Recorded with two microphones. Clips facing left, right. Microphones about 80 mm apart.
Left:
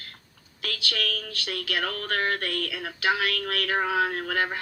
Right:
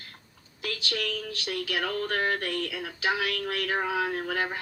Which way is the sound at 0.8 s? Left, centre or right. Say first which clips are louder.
Left 1 dB; left.